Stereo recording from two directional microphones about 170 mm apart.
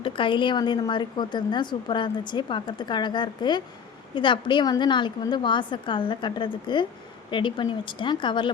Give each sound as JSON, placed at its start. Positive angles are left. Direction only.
{"t": 0.0, "sound": "speech", "side_deg": 30}